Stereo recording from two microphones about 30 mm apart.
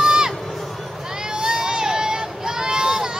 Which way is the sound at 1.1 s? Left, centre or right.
Right.